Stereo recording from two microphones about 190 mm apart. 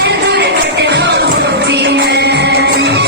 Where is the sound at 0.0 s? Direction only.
60° right (ahead or behind).